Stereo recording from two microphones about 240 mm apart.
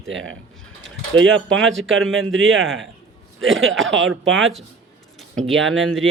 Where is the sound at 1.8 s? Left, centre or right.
Centre.